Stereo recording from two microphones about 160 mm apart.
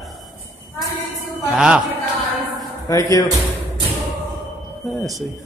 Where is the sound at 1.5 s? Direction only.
5° right (ahead or behind).